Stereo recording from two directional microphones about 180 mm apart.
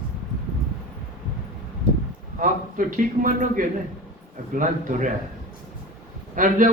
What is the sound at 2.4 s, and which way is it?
A man's voice, 45° right (ahead or behind).